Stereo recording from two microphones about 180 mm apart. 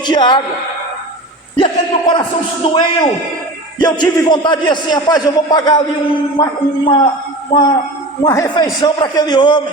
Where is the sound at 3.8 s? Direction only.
25° left (ahead or behind).